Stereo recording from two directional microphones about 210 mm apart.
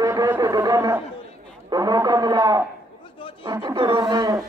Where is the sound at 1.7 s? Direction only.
15° right (ahead or behind).